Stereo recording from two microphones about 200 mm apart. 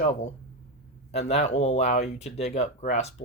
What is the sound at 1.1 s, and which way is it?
Speech, 30° left (ahead or behind).